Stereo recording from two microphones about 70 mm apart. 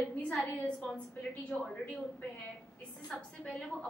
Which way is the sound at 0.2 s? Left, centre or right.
Centre.